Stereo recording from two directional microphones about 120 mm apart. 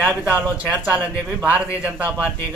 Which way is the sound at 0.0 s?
15° right (ahead or behind).